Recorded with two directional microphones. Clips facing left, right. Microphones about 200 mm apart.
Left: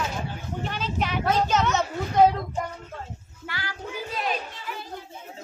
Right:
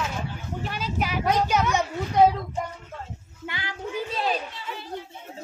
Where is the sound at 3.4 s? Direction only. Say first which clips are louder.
Right 2 dB; 20° right (ahead or behind).